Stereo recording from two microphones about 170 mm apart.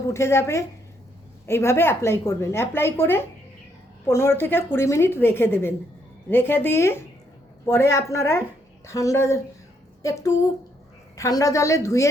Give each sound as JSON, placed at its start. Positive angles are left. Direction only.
{"t": 0.1, "sound": "a woman's voice", "side_deg": 15}